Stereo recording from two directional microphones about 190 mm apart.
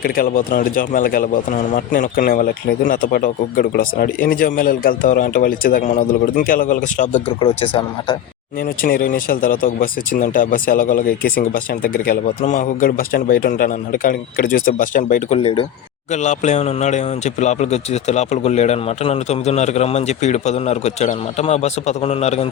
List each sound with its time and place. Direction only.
0.0 s a man's voice: 45° left (ahead or behind)
7.3 s speech: 30° left (ahead or behind)
8.8 s a man's voice: 45° left (ahead or behind)
15.4 s speech: 30° left (ahead or behind)